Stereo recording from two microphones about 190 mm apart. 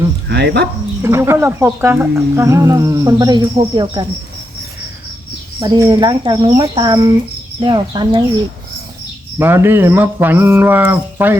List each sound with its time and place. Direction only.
0.3 s speech: 60° right (ahead or behind)
1.0 s speech: 15° right (ahead or behind)
5.5 s speech: 20° right (ahead or behind)
9.4 s speech: 10° right (ahead or behind)